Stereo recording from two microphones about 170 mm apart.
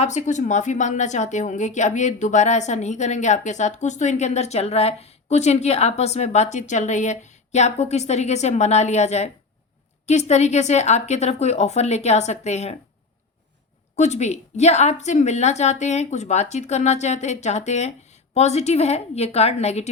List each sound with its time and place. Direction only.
0.0 s a woman's voice: 45° left (ahead or behind)
13.9 s a woman's voice: 40° left (ahead or behind)